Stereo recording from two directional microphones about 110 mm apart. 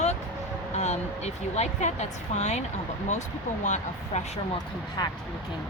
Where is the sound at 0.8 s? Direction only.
90° left.